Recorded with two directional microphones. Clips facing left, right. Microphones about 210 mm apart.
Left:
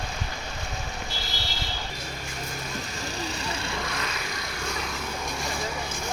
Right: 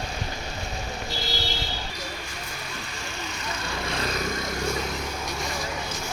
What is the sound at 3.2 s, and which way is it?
Vehicle, 30° left (ahead or behind).